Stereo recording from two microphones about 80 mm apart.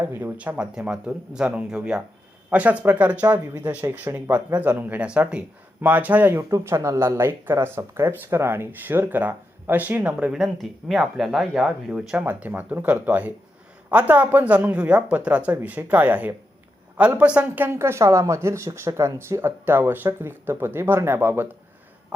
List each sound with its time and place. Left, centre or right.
0.0 s speech: right
6.5 s speech: right; by 12.1 s centre
12.1 s speech: right